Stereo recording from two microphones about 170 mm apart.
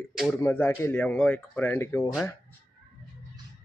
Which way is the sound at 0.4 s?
10° left (ahead or behind).